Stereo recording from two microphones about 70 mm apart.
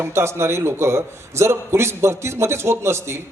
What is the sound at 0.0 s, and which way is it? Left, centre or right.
A man's voice, right.